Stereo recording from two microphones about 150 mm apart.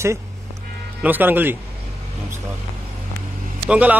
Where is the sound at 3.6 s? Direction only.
10° right (ahead or behind).